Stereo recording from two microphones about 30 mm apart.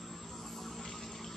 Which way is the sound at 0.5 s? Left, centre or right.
Centre.